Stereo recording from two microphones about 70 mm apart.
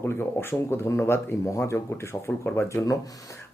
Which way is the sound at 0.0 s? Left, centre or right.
Left.